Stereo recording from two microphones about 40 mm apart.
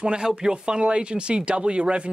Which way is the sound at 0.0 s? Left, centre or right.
Centre.